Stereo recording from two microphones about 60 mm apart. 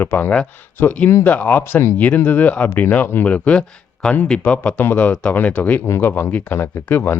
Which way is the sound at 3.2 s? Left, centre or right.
Left.